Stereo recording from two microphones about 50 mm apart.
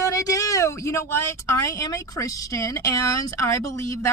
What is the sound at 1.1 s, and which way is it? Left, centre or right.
Speech, left.